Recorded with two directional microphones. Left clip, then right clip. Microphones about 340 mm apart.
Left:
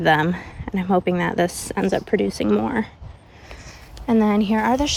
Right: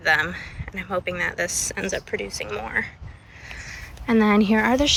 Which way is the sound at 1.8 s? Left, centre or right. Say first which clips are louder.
Left 6 dB; left.